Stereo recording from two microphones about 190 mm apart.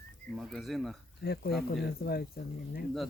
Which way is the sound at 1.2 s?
60° left (ahead or behind).